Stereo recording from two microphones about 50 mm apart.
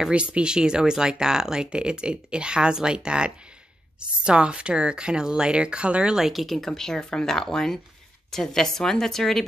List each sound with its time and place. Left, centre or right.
0.1 s speech: right
6.1 s speech: centre
6.4 s speech: centre